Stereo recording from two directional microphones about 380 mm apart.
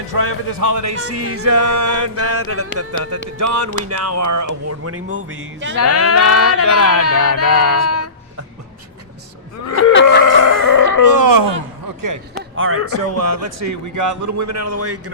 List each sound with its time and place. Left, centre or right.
0.1 s speech: right
5.0 s music: right
5.7 s speech: left
7.6 s speech: left
7.9 s a sound: left
9.9 s a sound: left
10.2 s a sound: left
11.1 s speech: right
12.4 s speech: right